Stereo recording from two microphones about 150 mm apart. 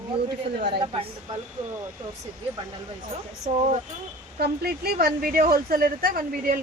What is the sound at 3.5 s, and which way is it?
Speech, 50° right (ahead or behind).